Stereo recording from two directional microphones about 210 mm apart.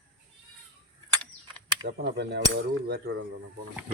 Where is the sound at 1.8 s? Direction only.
50° right (ahead or behind).